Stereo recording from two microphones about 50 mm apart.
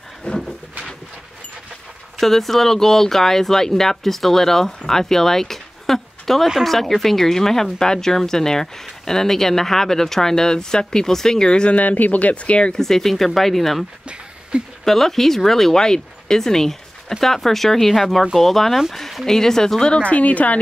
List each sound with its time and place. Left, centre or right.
0.3 s a sound: left
2.1 s speech: centre
11.7 s speech: left
12.7 s speech: centre
14.5 s speech: right
14.9 s speech: centre; by 20.5 s left